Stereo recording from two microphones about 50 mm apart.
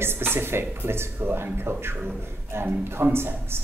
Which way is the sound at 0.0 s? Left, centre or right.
Right.